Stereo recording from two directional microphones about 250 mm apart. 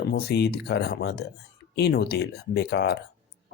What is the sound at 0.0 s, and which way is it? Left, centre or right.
Speech, left.